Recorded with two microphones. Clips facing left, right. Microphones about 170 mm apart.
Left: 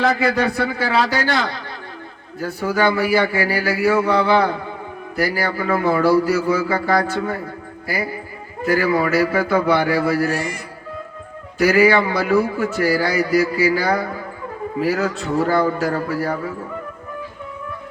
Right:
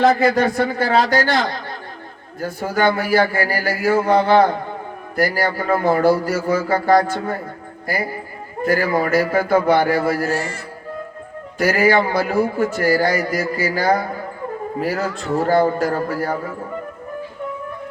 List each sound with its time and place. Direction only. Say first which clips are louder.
0.0 s a man's voice: right 3 dB; 50° right (ahead or behind)
8.6 s a man's voice: even; 50° right (ahead or behind)
10.2 s a man's voice: even; 15° left (ahead or behind)
11.5 s a man's voice: left 2 dB; 50° right (ahead or behind)
15.4 s a man's voice: right 4 dB; 50° right (ahead or behind)